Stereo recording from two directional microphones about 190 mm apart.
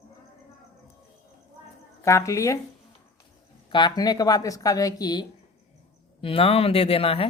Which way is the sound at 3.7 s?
25° left (ahead or behind).